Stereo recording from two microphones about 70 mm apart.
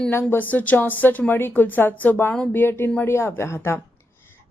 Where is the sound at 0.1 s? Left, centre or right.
Left.